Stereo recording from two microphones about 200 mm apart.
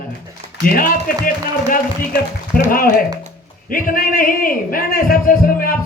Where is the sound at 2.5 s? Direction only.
45° left (ahead or behind).